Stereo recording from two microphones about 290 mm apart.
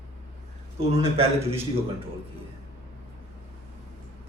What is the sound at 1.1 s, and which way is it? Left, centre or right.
Speech, centre.